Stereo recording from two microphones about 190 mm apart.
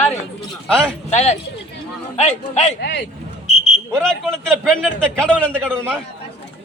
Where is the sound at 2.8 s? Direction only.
65° left (ahead or behind).